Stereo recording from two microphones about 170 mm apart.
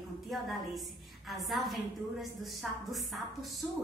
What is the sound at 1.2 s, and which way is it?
A woman's voice, centre (ahead or behind).